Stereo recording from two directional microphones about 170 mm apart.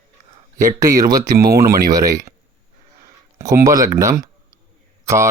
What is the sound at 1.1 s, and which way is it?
Speech, 20° right (ahead or behind).